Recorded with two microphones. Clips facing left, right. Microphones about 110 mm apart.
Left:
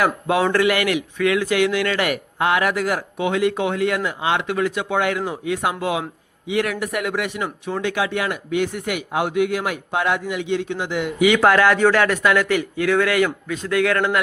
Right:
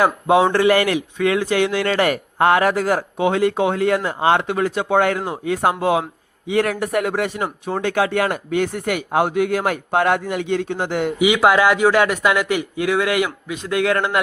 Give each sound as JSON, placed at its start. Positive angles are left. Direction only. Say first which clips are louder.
{"t": 0.0, "sound": "speech", "louder": "right 4 dB", "side_deg": -25}
{"t": 11.2, "sound": "a man's voice", "louder": "even", "side_deg": -15}